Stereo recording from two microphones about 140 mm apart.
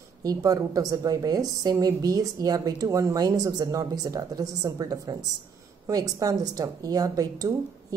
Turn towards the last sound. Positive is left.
turn(degrees=-25)  # may be behind; listen again after turning